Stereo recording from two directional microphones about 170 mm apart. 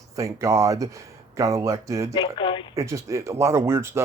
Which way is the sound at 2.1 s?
30° left (ahead or behind).